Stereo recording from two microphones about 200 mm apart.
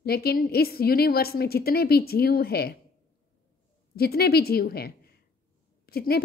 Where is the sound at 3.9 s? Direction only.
50° left (ahead or behind).